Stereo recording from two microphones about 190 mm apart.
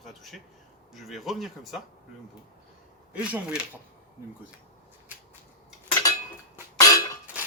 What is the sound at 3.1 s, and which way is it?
Speech, 5° right (ahead or behind).